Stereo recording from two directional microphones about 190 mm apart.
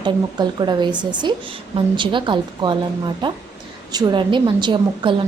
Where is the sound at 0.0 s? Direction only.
25° right (ahead or behind).